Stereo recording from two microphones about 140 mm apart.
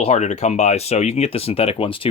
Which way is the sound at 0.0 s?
55° left (ahead or behind).